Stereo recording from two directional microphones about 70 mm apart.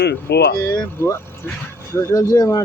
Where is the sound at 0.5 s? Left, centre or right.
Left.